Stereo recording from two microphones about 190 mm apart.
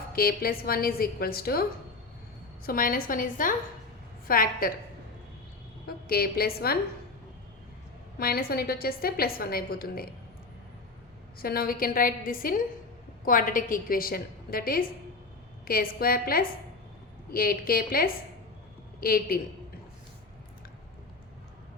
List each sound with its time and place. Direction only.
0.1 s a woman's voice: 50° left (ahead or behind)
2.6 s a woman's voice: 50° left (ahead or behind)
5.8 s a woman's voice: 55° left (ahead or behind)
8.2 s a woman's voice: 50° left (ahead or behind)
11.3 s a woman's voice: 50° left (ahead or behind)